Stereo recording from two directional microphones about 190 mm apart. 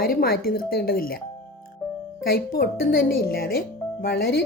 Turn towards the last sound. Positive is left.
turn(degrees=50)  # may be behind; listen again after turning